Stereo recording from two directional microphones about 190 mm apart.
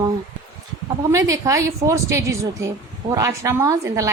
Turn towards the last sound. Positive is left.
turn(degrees=-15)  # may be behind; listen again after turning